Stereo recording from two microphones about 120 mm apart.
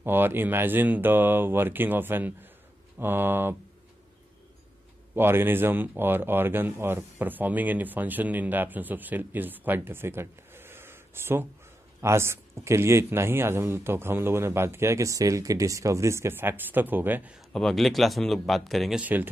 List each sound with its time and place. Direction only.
0.0 s speech: 15° right (ahead or behind)
5.1 s speech: 20° right (ahead or behind)
17.5 s speech: 5° left (ahead or behind)
18.9 s speech: 15° right (ahead or behind)